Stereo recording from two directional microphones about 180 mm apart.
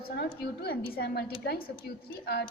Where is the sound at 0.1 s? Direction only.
65° left (ahead or behind).